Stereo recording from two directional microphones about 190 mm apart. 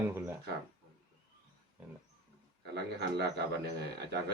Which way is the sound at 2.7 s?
60° right (ahead or behind).